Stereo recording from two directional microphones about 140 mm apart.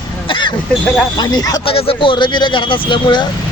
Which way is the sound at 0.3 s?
35° left (ahead or behind).